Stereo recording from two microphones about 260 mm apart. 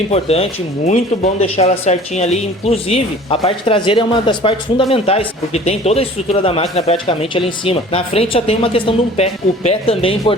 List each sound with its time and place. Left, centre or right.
0.1 s speech: left